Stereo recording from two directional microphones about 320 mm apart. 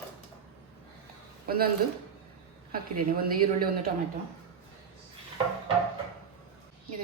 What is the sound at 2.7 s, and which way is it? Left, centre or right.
A woman's voice, right.